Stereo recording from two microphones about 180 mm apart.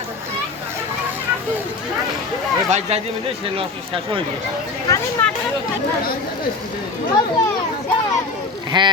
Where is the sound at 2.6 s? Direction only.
35° right (ahead or behind).